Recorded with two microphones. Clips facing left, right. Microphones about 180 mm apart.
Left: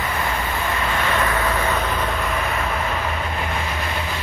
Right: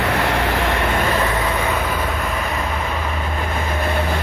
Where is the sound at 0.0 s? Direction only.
80° right.